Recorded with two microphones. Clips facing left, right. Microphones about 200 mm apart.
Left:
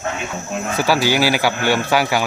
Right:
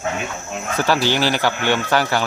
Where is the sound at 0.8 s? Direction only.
10° left (ahead or behind).